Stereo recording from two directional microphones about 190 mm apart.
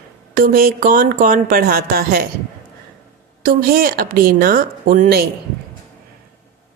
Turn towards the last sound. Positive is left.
turn(degrees=-50)  # may be behind; listen again after turning